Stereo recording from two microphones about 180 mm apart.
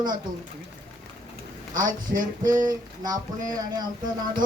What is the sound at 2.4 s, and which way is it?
Speech, 20° right (ahead or behind).